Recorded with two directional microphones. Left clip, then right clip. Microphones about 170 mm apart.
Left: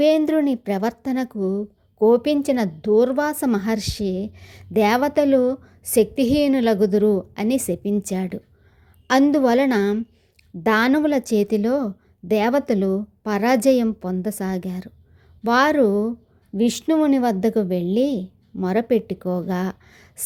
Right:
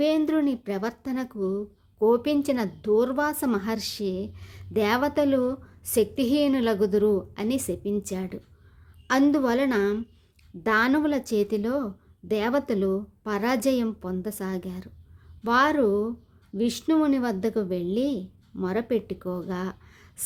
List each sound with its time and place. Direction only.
0.0 s a woman's voice: 25° left (ahead or behind)